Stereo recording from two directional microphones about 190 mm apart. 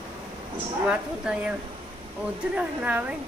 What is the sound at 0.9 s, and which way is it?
Speech, 5° right (ahead or behind).